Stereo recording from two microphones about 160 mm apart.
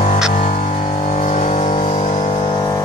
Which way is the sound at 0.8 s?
35° left (ahead or behind).